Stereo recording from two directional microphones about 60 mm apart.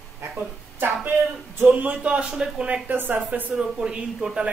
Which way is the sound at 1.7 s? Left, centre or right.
Right.